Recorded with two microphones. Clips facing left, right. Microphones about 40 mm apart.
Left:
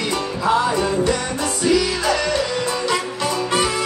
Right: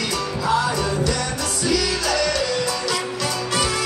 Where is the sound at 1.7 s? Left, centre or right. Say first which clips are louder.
Left 3 dB; left.